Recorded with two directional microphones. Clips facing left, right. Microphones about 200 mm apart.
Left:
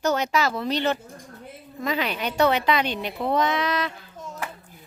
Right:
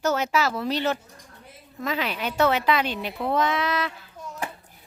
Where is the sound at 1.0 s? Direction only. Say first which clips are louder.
Left 7 dB; 50° left (ahead or behind).